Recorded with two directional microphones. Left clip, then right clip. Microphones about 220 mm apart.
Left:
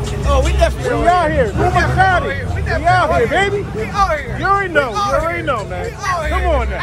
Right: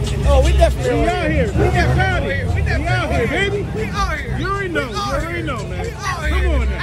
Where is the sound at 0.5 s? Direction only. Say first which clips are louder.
Even; 30° left (ahead or behind).